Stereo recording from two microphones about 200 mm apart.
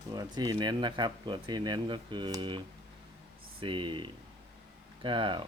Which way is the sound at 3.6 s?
25° right (ahead or behind).